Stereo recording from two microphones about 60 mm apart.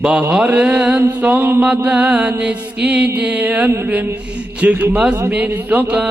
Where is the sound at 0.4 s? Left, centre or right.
Right.